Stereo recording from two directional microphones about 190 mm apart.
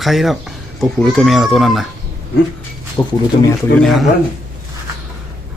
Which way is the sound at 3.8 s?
Centre (ahead or behind).